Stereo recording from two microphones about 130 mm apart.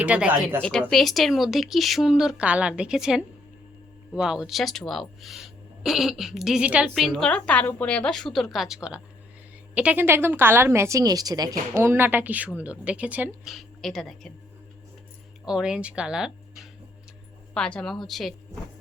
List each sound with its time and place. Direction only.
0.0 s a woman's voice: 10° right (ahead or behind)
0.6 s a woman's voice: 5° left (ahead or behind); by 11.5 s 30° right (ahead or behind)
11.7 s a woman's voice: 20° right (ahead or behind)
13.5 s speech: centre (ahead or behind)
15.4 s speech: 5° right (ahead or behind)
17.5 s speech: 5° left (ahead or behind)